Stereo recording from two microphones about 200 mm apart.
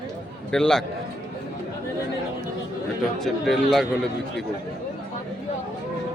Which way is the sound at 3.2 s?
Centre (ahead or behind).